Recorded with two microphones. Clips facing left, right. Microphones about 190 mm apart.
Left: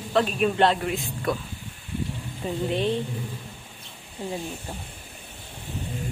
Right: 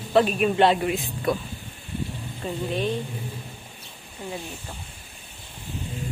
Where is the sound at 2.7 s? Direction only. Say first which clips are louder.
Left 1 dB; 25° left (ahead or behind).